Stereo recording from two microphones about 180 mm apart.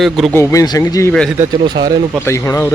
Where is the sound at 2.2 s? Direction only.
15° left (ahead or behind).